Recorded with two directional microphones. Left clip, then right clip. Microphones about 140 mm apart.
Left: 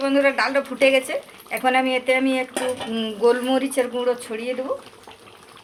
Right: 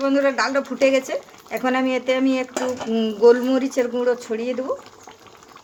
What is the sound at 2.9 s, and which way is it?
Speech, 90° right.